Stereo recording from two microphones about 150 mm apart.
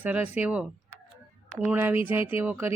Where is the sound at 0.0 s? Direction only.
10° right (ahead or behind).